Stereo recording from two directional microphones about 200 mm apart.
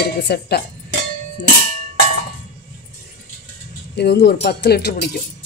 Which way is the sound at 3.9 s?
55° left (ahead or behind).